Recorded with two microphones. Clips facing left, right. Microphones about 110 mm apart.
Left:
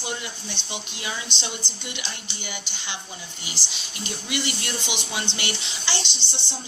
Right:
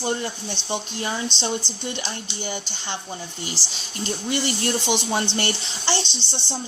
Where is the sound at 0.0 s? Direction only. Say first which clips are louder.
Right 7 dB; 35° right (ahead or behind).